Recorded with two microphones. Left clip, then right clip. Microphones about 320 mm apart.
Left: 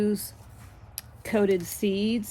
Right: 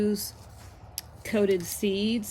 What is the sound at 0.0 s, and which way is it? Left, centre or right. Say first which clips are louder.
Speech: even; centre.